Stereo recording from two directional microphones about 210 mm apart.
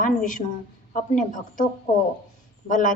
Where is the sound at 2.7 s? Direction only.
35° left (ahead or behind).